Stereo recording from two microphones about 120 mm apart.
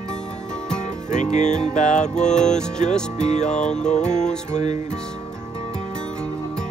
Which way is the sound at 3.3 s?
75° left (ahead or behind).